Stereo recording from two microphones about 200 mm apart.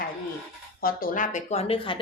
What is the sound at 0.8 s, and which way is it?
A woman's voice, 45° left (ahead or behind).